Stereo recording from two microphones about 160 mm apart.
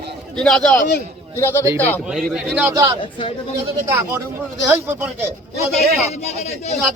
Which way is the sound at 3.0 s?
35° left (ahead or behind).